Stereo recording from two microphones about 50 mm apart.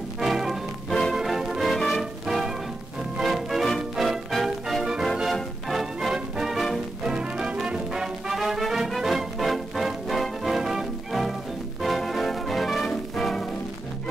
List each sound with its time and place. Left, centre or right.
0.2 s music: centre
0.8 s music: centre
1.1 s music: centre
1.8 s music: centre
6.5 s music: centre
7.1 s music: centre